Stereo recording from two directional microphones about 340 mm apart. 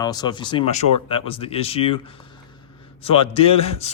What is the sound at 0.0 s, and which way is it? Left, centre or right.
Speech, centre.